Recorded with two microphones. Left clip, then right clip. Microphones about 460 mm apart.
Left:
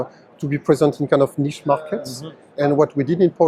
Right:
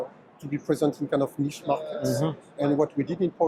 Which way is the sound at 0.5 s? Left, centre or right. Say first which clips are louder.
Left 9 dB; left.